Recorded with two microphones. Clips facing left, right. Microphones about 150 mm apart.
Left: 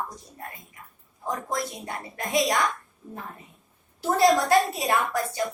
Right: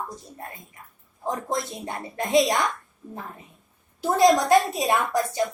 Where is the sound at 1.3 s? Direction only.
25° right (ahead or behind).